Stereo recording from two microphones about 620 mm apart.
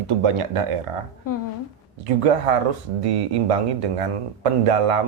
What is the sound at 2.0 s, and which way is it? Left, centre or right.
Speech, right.